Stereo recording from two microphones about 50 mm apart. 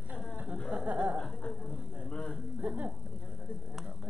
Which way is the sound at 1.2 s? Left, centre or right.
Centre.